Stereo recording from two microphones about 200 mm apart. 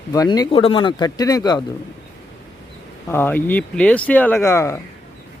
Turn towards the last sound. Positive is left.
turn(degrees=15)  # may be behind; listen again after turning